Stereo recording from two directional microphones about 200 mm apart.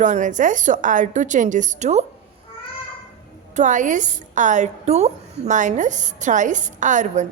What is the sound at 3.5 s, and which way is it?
A woman's voice, 40° right (ahead or behind).